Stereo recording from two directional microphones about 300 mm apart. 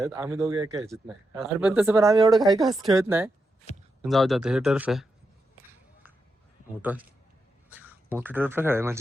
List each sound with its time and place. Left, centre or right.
0.0 s speech: centre
2.3 s speech: centre
3.7 s a sound: left
4.0 s speech: centre
6.9 s speech: centre